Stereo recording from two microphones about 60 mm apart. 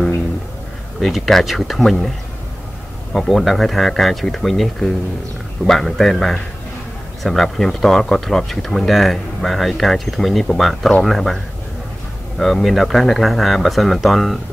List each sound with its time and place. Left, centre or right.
1.0 s speech: centre
12.4 s speech: centre